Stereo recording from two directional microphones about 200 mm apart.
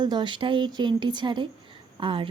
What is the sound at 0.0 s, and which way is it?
Speech, 20° right (ahead or behind).